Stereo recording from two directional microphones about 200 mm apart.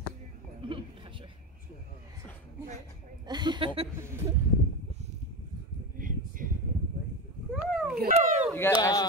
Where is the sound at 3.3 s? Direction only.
20° right (ahead or behind).